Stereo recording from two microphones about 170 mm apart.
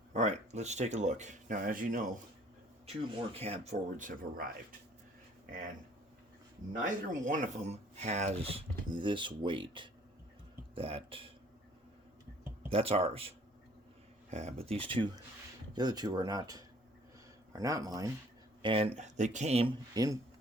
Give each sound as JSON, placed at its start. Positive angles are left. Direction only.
{"t": 0.1, "sound": "speech", "side_deg": -40}
{"t": 3.3, "sound": "speech", "side_deg": -40}
{"t": 6.8, "sound": "speech", "side_deg": -50}
{"t": 12.7, "sound": "speech", "side_deg": -35}
{"t": 18.6, "sound": "speech", "side_deg": -30}
{"t": 19.9, "sound": "speech", "side_deg": -20}